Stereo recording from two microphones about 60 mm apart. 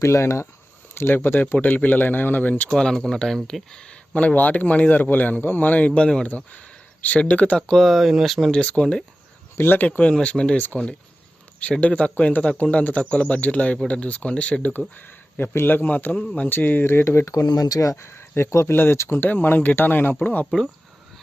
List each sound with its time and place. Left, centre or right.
0.0 s speech: left
0.9 s a man's voice: left
2.7 s speech: centre
4.1 s a man's voice: left
7.8 s speech: centre
8.5 s speech: centre
9.6 s speech: left
10.0 s speech: centre
11.8 s a man's voice: left
14.9 s speech: left
16.2 s speech: centre
16.5 s speech: left
17.2 s a man's voice: left